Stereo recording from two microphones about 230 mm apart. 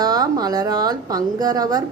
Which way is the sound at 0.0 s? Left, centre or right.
Centre.